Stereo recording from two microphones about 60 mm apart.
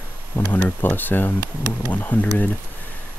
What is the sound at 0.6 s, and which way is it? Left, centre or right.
Speech, left.